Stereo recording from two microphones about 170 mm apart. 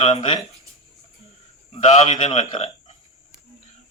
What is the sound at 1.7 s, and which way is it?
A man's voice, 40° left (ahead or behind).